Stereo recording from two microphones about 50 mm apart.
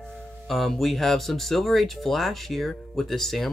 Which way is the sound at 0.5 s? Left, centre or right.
Centre.